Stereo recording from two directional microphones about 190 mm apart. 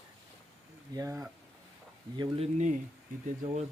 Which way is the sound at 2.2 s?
30° right (ahead or behind).